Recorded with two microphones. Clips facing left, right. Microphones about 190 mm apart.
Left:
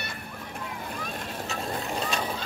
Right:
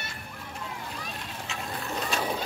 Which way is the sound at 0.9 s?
50° left (ahead or behind).